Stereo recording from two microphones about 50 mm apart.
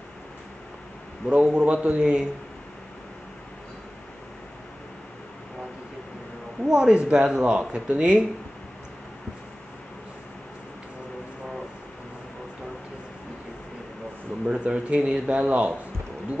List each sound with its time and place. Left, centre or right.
1.2 s speech: right
6.6 s speech: centre
14.6 s speech: right